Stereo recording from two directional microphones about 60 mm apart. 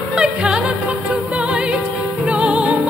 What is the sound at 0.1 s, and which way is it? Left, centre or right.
Music, centre.